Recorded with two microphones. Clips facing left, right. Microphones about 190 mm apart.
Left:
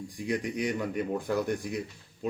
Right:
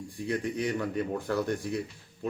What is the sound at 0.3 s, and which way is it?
A man's voice, 15° left (ahead or behind).